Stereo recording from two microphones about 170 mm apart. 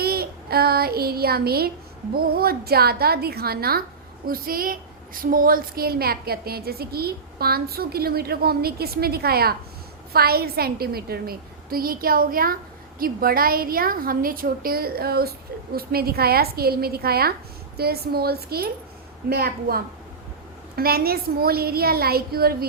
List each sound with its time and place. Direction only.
0.0 s child singing: 65° right (ahead or behind)
2.1 s a woman's voice: 65° right (ahead or behind)